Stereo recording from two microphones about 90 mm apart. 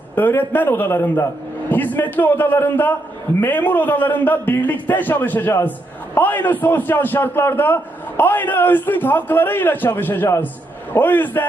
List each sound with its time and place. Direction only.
0.2 s a man's voice: 20° left (ahead or behind)